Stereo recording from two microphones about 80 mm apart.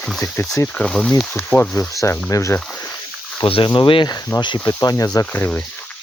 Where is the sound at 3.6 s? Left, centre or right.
Left.